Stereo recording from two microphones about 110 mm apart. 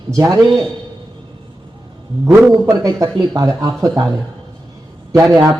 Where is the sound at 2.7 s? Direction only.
30° right (ahead or behind).